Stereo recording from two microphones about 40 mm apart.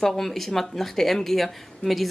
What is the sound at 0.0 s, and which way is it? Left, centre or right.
Speech, centre.